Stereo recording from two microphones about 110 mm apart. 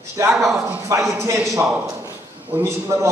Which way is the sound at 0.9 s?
30° right (ahead or behind).